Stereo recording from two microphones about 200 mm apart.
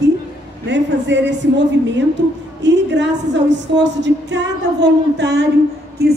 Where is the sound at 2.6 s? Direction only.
65° right (ahead or behind).